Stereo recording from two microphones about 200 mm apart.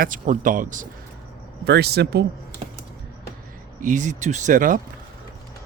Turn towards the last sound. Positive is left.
turn(degrees=-40)  # may be behind; listen again after turning